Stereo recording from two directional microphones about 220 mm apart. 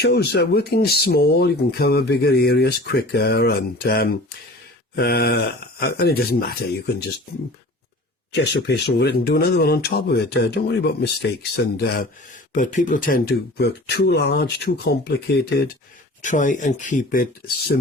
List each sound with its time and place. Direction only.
0.0 s speech: 45° left (ahead or behind)
8.3 s speech: 50° left (ahead or behind)
12.5 s speech: 35° left (ahead or behind)
16.2 s speech: 35° left (ahead or behind)